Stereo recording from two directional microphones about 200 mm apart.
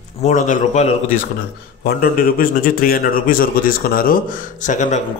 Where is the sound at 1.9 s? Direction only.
50° left (ahead or behind).